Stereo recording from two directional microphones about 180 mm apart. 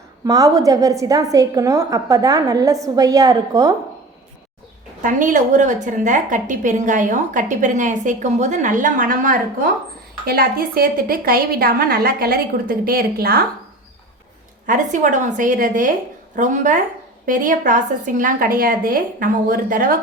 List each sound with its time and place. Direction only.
0.3 s a woman's voice: 20° right (ahead or behind)
5.0 s a woman's voice: 45° right (ahead or behind)
14.7 s a woman's voice: 45° right (ahead or behind)